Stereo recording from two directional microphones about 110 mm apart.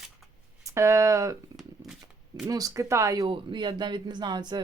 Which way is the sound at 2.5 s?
30° right (ahead or behind).